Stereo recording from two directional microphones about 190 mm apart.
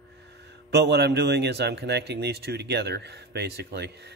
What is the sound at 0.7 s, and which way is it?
A man's voice, 60° right (ahead or behind).